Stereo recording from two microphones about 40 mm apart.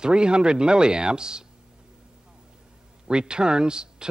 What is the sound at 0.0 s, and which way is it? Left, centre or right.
Speech, right.